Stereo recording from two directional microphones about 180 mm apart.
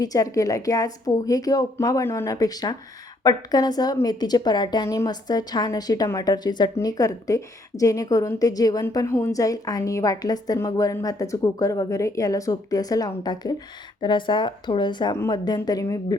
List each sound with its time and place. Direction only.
0.0 s a woman's voice: 20° left (ahead or behind)